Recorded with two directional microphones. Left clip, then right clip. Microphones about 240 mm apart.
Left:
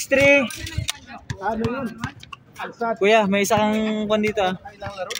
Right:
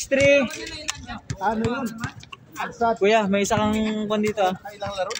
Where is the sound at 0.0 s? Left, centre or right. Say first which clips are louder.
Left 2 dB; left.